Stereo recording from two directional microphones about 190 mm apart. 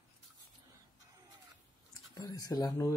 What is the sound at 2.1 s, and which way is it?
Speech, 20° left (ahead or behind).